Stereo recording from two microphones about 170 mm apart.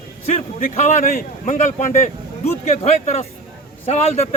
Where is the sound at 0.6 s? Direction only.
45° left (ahead or behind).